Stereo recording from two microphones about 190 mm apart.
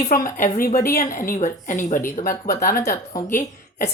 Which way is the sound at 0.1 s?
45° left (ahead or behind).